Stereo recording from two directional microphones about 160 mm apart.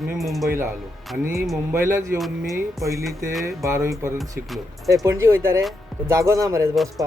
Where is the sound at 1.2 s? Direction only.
15° right (ahead or behind).